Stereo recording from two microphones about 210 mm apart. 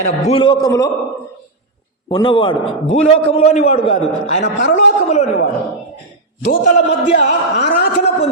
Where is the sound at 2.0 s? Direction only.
20° left (ahead or behind).